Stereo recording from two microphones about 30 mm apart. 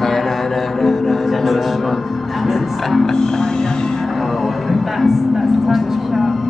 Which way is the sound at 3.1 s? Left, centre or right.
Left.